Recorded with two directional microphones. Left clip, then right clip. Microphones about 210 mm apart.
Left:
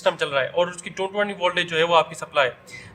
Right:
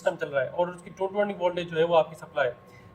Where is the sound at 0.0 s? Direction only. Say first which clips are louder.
Left 5 dB; 45° left (ahead or behind).